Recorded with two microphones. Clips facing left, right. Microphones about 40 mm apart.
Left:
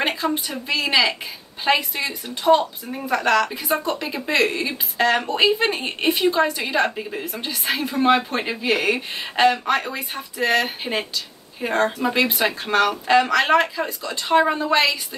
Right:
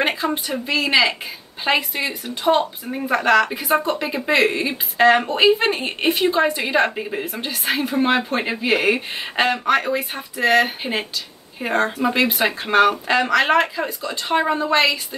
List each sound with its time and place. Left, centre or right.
0.1 s a woman's voice: centre